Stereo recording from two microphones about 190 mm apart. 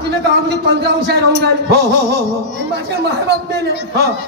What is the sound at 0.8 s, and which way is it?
Speech, 60° right (ahead or behind).